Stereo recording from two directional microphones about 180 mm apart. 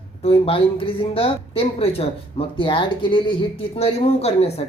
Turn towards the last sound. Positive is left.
turn(degrees=35)  # may be behind; listen again after turning